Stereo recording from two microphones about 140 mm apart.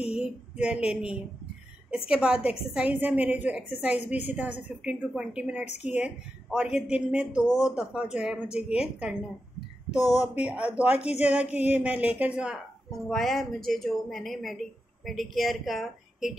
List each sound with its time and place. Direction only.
0.1 s a sound: 5° right (ahead or behind)
2.0 s a woman's voice: 5° right (ahead or behind)
10.0 s speech: 20° left (ahead or behind)
10.3 s a woman's voice: 10° right (ahead or behind)
11.0 s a woman's voice: 45° left (ahead or behind)
11.2 s a woman's voice: 10° right (ahead or behind)